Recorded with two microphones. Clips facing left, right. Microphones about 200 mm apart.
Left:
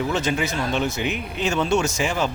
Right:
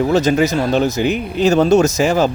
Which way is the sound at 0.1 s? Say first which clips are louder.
Right 10 dB; 40° right (ahead or behind).